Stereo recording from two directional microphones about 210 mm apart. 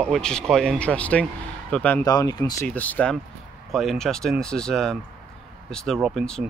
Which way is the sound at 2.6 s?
5° left (ahead or behind).